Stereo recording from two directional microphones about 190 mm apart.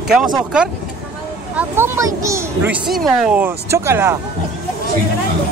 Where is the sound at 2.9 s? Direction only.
Centre (ahead or behind).